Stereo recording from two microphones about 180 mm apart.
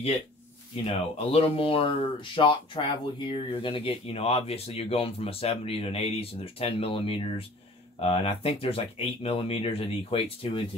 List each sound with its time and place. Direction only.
0.8 s speech: 35° left (ahead or behind)